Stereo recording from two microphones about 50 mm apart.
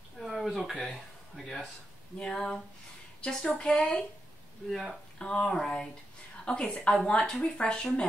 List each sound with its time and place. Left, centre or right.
0.3 s a sound: centre
0.8 s speech: centre
2.1 s a woman's voice: centre
4.6 s speech: centre
5.2 s a woman's voice: left